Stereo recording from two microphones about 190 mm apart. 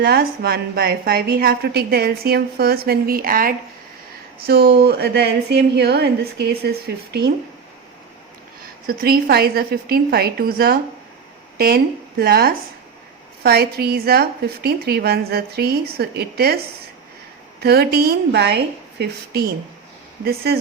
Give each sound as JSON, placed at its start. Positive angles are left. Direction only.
{"t": 0.0, "sound": "a woman's voice", "side_deg": -55}
{"t": 8.9, "sound": "a woman's voice", "side_deg": -50}
{"t": 17.6, "sound": "a woman's voice", "side_deg": -55}